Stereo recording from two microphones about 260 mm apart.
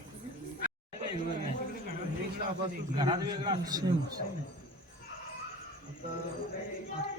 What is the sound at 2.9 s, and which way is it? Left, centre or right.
Speech, centre.